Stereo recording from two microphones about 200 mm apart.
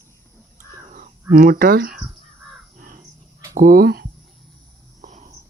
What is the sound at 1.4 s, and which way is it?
Speech, 45° right (ahead or behind).